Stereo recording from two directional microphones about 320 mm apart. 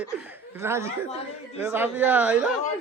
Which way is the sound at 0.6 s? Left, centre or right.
Centre.